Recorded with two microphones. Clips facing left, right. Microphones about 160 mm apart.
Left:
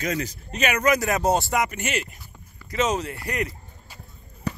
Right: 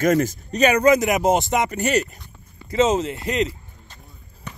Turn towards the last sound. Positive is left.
turn(degrees=35)  # may be behind; listen again after turning